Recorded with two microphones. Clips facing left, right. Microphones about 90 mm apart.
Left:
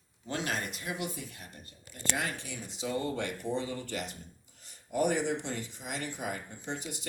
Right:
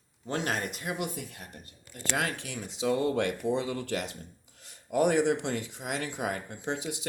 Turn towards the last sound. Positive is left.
turn(degrees=-85)